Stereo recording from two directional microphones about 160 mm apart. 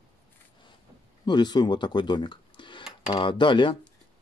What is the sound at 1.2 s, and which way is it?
Speech, 25° left (ahead or behind).